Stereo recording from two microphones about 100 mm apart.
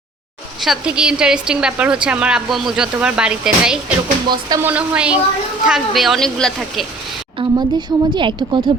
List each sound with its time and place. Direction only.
0.6 s speech: 5° right (ahead or behind)
4.3 s speech: 40° right (ahead or behind)
4.6 s speech: 15° right (ahead or behind); by 6.5 s 5° left (ahead or behind)
7.5 s a woman's voice: 50° right (ahead or behind)